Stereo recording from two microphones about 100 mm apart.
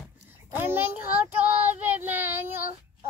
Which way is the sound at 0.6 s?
20° right (ahead or behind).